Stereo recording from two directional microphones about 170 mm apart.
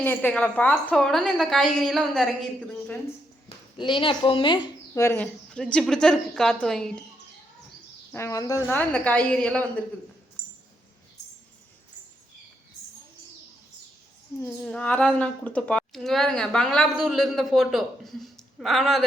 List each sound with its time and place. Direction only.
0.0 s a woman's voice: 10° left (ahead or behind)
3.8 s a woman's voice: 30° left (ahead or behind)
4.9 s a woman's voice: 10° left (ahead or behind)
8.1 s a woman's voice: 15° left (ahead or behind)
14.4 s a woman's voice: 5° left (ahead or behind)